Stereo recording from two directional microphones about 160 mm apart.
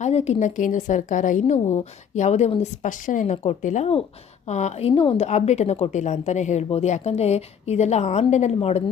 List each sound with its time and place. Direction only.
0.0 s a woman's voice: 40° left (ahead or behind)